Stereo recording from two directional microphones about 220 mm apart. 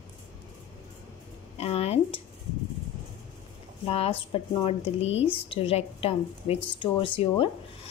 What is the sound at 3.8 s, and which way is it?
Speech, 25° left (ahead or behind).